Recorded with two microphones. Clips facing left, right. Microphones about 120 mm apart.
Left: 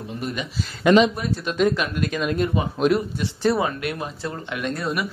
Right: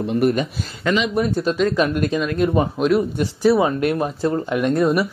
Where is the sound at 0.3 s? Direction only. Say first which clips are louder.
Right 7 dB; 45° right (ahead or behind).